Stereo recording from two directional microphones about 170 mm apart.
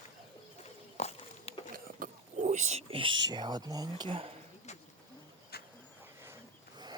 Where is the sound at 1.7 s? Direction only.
55° right (ahead or behind).